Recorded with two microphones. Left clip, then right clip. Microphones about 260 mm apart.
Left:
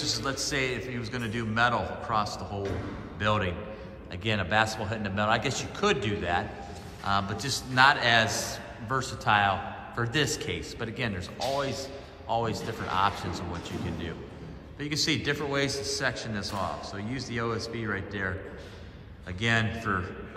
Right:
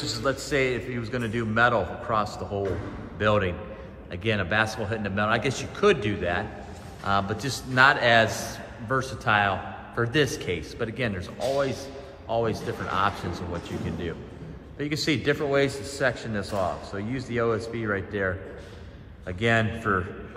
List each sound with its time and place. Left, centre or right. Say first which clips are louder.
0.0 s a man's voice: right 2 dB; centre